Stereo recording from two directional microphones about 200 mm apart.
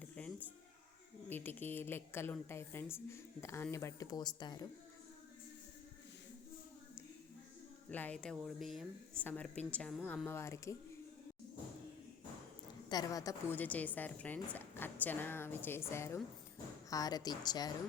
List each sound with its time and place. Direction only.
0.0 s a sound: 10° left (ahead or behind)
1.3 s a woman's voice: 10° left (ahead or behind)
7.9 s a woman's voice: 10° left (ahead or behind)
12.9 s a woman's voice: 20° left (ahead or behind)